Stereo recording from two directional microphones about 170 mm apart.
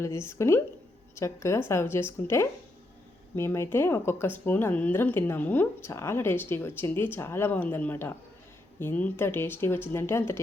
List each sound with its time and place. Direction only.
0.0 s speech: 15° left (ahead or behind)